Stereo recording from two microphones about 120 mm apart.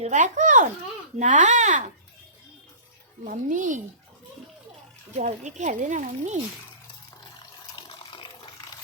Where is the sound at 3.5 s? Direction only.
90° right.